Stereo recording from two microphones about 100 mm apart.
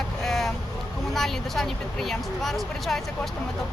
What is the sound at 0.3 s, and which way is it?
Vehicle, 5° left (ahead or behind).